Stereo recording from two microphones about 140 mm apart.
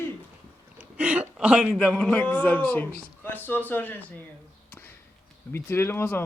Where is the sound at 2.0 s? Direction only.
10° left (ahead or behind).